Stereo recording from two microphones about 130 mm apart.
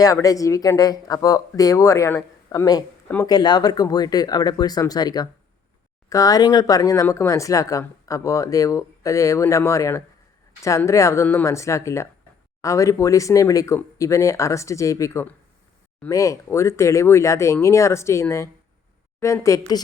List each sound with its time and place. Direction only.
0.0 s speech: 25° left (ahead or behind)